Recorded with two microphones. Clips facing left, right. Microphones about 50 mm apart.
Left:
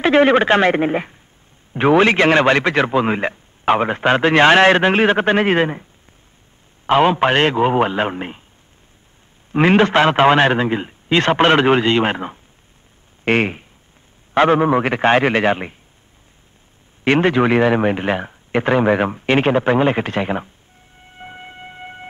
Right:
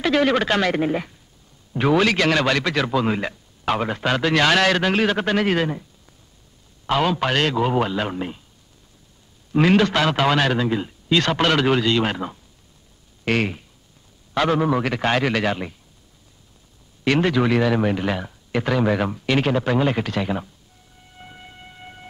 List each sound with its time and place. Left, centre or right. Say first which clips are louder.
0.0 s a man's voice: left 6 dB; left
6.9 s a man's voice: left 6 dB; left
9.5 s a man's voice: left 4 dB; left
13.2 s a sound: left 5 dB; left
14.3 s a man's voice: left 6 dB; left
17.0 s a man's voice: left 4 dB; left
21.2 s siren: left 7 dB; left